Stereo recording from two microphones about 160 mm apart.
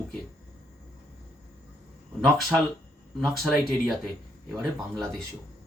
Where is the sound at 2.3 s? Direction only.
Centre (ahead or behind).